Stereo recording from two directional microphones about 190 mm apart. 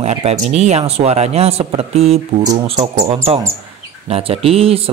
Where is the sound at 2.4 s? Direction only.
20° right (ahead or behind).